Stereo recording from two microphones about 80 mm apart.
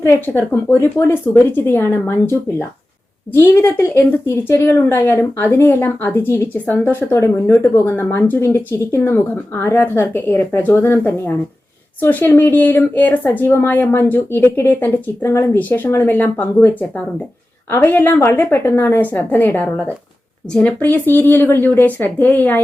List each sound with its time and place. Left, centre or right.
0.0 s a woman's voice: left
7.1 s speech: left
7.9 s a woman's voice: left
8.4 s a woman's voice: left
15.2 s a woman's voice: left
17.7 s a woman's voice: left